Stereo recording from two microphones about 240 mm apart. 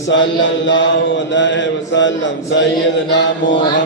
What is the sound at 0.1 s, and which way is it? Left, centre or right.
A man's voice, left.